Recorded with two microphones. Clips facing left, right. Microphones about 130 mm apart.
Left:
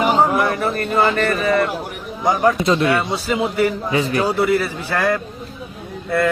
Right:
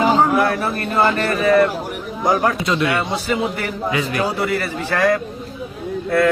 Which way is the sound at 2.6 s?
35° left (ahead or behind).